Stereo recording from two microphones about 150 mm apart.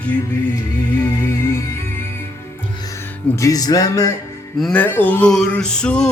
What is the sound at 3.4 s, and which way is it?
Music, 25° left (ahead or behind).